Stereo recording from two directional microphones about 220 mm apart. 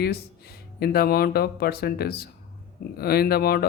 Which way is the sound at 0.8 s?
45° left (ahead or behind).